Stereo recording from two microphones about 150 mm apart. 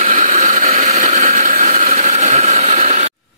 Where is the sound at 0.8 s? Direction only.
50° right (ahead or behind).